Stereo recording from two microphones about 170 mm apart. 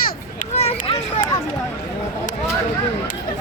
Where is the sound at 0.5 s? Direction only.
35° left (ahead or behind).